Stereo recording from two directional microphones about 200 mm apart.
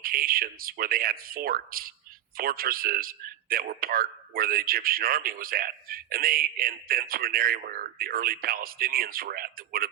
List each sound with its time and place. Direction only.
0.0 s speech: 45° right (ahead or behind)